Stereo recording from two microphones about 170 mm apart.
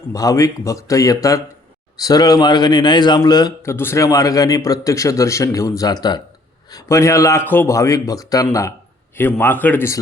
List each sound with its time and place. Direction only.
0.1 s a man's voice: 20° left (ahead or behind)